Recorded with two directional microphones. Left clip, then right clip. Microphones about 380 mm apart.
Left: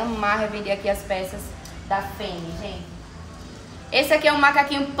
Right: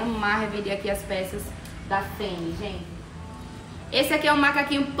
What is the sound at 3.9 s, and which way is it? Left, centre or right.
Speech, centre.